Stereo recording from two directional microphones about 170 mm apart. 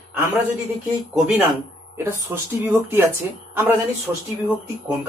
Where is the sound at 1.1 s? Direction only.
5° right (ahead or behind).